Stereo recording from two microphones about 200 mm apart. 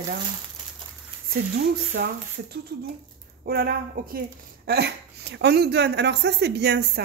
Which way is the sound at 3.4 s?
50° right (ahead or behind).